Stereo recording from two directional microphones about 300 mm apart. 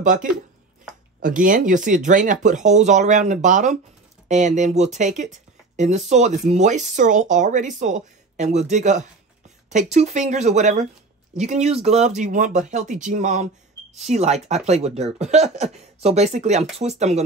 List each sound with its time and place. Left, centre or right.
0.0 s speech: right